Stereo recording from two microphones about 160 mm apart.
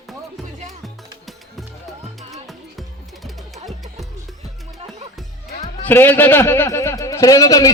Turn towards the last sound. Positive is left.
turn(degrees=20)  # may be behind; listen again after turning